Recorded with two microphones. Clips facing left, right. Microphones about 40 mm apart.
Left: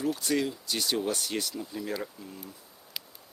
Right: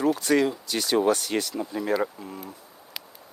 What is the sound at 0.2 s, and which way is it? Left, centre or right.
Speech, right.